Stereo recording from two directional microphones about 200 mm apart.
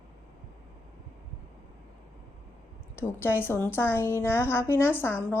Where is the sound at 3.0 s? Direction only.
10° left (ahead or behind).